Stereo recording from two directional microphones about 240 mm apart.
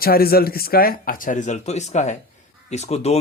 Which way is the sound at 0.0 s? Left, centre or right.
Left.